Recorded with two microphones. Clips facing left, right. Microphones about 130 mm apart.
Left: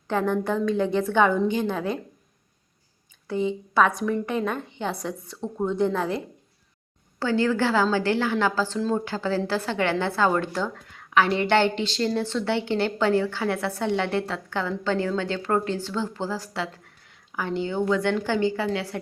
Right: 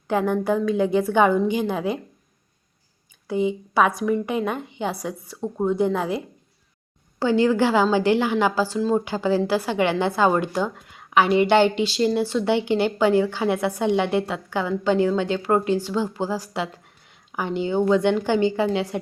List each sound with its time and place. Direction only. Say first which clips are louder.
0.1 s a woman's voice: right 3 dB; 10° right (ahead or behind)
3.2 s a woman's voice: right 3 dB; 15° right (ahead or behind)